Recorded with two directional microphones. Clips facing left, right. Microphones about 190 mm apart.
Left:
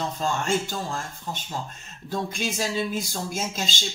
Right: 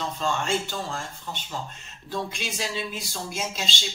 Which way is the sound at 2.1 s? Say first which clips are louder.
Left 3 dB; 45° left (ahead or behind).